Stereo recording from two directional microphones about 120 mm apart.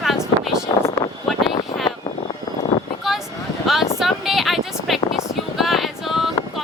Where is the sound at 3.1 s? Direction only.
Centre (ahead or behind).